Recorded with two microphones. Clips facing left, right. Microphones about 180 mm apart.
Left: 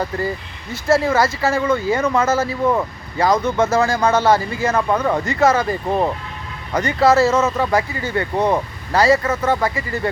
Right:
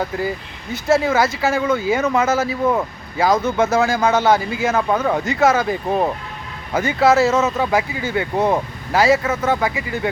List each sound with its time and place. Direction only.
0.7 s speech: centre (ahead or behind)